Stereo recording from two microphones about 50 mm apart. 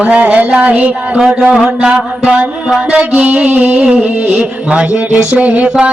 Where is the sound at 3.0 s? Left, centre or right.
Right.